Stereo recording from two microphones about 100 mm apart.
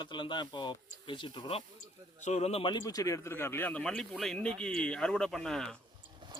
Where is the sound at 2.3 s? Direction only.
90° left.